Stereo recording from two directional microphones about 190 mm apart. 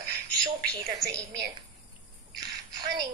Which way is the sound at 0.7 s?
15° right (ahead or behind).